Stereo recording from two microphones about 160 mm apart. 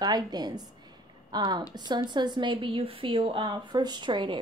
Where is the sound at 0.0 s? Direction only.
25° right (ahead or behind).